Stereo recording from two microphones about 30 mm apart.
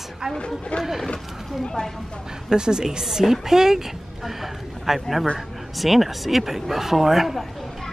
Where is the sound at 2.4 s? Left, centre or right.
Right.